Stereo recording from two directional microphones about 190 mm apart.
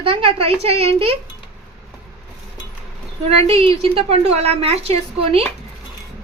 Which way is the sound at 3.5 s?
30° right (ahead or behind).